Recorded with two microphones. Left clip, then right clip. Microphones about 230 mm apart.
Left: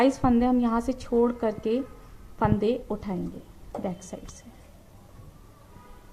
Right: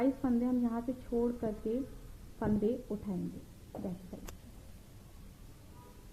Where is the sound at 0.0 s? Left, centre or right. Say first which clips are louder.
Left 11 dB; left.